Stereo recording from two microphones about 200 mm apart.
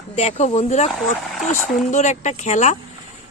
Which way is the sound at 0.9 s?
Centre (ahead or behind).